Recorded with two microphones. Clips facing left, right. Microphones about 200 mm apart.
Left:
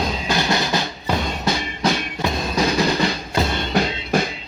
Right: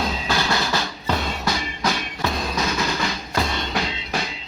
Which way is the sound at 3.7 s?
50° left (ahead or behind).